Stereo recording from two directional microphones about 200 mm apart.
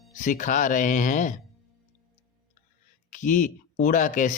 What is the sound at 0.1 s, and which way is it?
Speech, 40° left (ahead or behind).